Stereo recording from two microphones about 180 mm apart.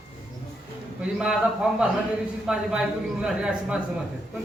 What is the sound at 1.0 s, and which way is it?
A man's voice, 5° right (ahead or behind).